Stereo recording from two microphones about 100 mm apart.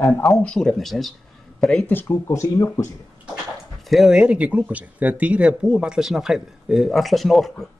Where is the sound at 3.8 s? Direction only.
Centre (ahead or behind).